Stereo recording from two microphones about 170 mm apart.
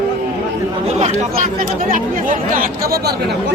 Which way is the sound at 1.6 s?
55° right (ahead or behind).